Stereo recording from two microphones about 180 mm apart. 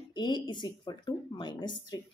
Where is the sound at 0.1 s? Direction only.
25° left (ahead or behind).